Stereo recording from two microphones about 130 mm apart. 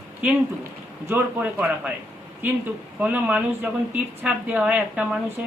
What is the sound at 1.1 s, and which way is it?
Speech, 15° right (ahead or behind).